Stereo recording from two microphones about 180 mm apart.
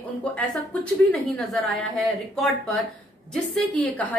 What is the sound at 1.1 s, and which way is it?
A woman's voice, centre (ahead or behind).